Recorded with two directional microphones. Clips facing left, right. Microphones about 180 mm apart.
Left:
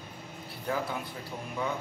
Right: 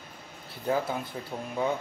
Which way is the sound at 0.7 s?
25° right (ahead or behind).